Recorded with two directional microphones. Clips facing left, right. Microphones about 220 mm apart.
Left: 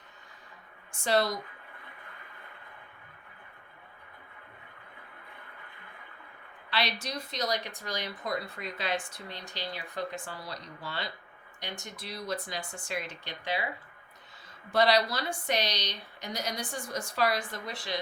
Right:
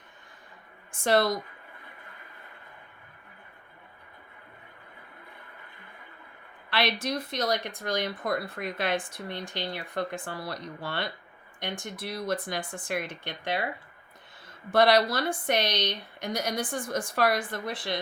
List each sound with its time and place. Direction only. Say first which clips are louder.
1.0 s speech: right 3 dB; 55° right (ahead or behind)
6.7 s speech: right 5 dB; 55° right (ahead or behind)
14.7 s a woman's voice: right 4 dB; 55° right (ahead or behind)